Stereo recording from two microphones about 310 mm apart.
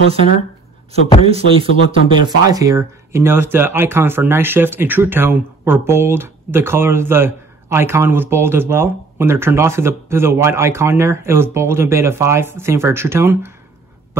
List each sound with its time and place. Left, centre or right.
1.2 s speech: centre